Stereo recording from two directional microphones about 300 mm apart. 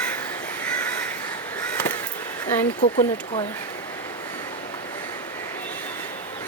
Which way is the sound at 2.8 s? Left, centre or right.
Left.